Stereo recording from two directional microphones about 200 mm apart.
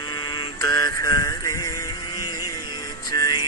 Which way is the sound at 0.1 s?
20° left (ahead or behind).